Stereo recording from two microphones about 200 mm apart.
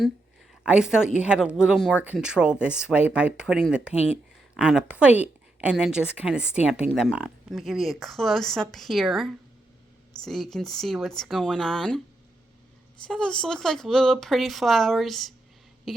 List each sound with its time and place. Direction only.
0.6 s speech: 5° right (ahead or behind)
13.1 s speech: 5° left (ahead or behind)
15.9 s a sound: centre (ahead or behind)